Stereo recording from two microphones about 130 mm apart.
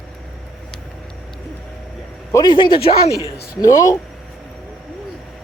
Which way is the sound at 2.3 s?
25° left (ahead or behind).